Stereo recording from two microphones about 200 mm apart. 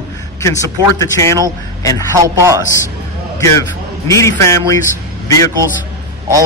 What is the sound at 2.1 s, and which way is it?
Speech, 15° right (ahead or behind).